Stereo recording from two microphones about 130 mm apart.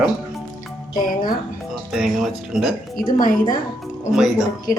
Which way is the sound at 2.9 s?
90° left.